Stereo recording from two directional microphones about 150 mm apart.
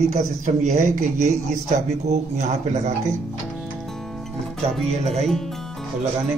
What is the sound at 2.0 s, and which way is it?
Speech, 50° right (ahead or behind).